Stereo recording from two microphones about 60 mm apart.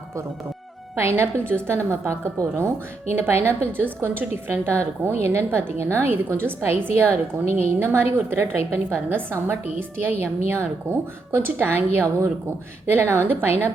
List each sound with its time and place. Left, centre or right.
0.9 s a woman's voice: right
1.5 s a woman's voice: right
4.7 s a woman's voice: right